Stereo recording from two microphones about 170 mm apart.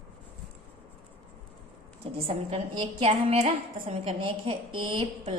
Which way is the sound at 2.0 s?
35° right (ahead or behind).